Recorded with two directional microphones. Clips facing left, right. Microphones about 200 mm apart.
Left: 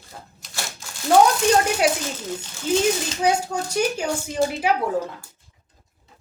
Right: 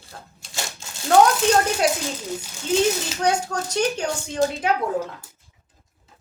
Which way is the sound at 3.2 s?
5° left (ahead or behind).